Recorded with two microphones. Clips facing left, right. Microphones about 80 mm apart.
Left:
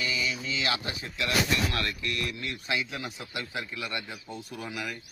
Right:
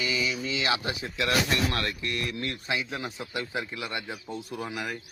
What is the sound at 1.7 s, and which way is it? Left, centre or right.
A man's voice, right.